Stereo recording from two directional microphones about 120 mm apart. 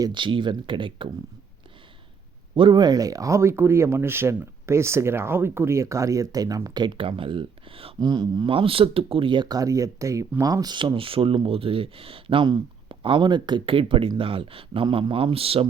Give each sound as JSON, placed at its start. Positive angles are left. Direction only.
{"t": 0.0, "sound": "speech", "side_deg": -40}
{"t": 2.6, "sound": "speech", "side_deg": -40}
{"t": 7.9, "sound": "speech", "side_deg": -35}